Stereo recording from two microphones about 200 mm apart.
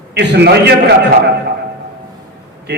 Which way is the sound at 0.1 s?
55° right (ahead or behind).